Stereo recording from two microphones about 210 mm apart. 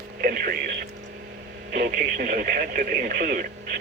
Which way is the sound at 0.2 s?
45° right (ahead or behind).